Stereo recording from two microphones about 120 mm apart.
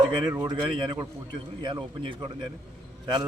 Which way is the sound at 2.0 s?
50° right (ahead or behind).